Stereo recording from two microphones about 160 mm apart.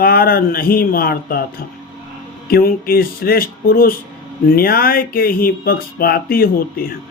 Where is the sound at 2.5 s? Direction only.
70° left (ahead or behind).